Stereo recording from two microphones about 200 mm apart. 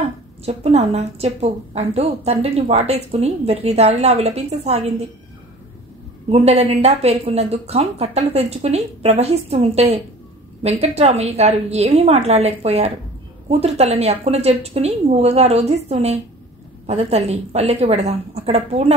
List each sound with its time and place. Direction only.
0.5 s a woman's voice: 30° right (ahead or behind)
6.2 s a woman's voice: 30° right (ahead or behind)